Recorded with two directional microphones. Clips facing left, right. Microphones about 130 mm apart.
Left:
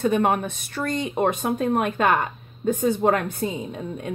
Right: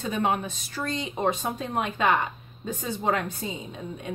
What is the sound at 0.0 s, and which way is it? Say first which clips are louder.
Speech: left 6 dB; 55° left (ahead or behind).